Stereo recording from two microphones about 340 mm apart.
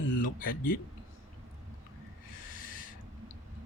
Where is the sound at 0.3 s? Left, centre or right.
Left.